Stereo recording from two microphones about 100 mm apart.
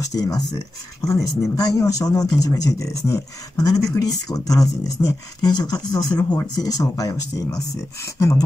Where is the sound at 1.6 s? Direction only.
35° left (ahead or behind).